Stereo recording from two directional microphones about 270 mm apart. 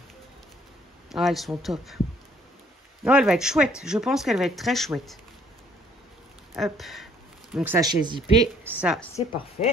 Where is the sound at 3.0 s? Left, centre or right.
Centre.